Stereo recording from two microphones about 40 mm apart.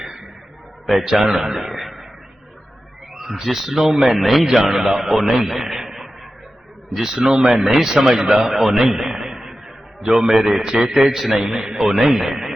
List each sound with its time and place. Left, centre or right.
0.0 s a sound: centre
0.9 s a man's voice: centre
3.2 s a man's voice: centre
7.6 s a man's voice: centre
8.1 s a man's voice: centre
10.9 s a man's voice: centre